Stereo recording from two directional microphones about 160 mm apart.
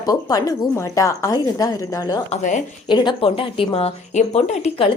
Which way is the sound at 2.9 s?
30° left (ahead or behind).